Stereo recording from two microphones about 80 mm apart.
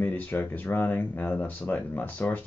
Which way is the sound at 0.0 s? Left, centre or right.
Left.